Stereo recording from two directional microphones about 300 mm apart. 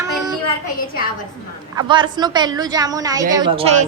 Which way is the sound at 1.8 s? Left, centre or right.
Centre.